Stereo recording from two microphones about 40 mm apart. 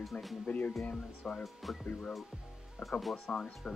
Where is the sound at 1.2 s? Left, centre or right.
Centre.